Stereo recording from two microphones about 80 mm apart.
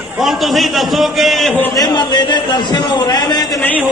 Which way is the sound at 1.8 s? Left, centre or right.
Left.